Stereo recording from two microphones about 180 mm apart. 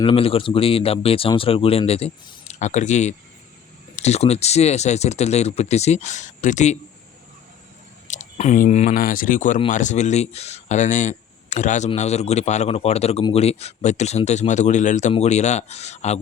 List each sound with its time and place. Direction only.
0.0 s speech: 30° left (ahead or behind)
8.0 s speech: 40° left (ahead or behind)